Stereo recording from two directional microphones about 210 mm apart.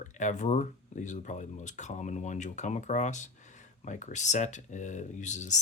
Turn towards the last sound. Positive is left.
turn(degrees=35)  # may be behind; listen again after turning